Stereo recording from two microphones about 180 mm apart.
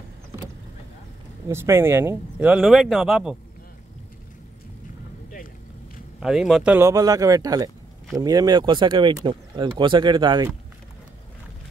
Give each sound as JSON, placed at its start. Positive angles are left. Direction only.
{"t": 1.5, "sound": "speech", "side_deg": -15}
{"t": 6.1, "sound": "speech", "side_deg": 0}